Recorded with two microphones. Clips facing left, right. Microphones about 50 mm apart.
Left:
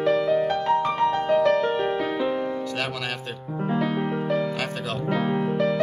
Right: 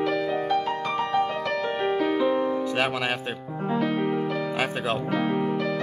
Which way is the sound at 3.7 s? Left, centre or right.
Centre.